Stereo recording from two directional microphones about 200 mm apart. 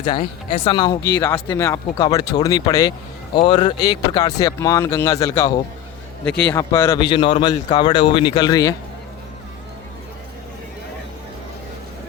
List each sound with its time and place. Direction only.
0.0 s speech: 25° left (ahead or behind)